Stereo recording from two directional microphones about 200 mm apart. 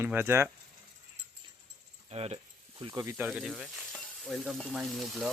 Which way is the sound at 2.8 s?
20° right (ahead or behind).